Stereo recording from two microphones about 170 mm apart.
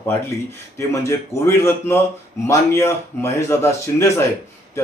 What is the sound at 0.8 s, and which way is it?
Speech, 15° left (ahead or behind).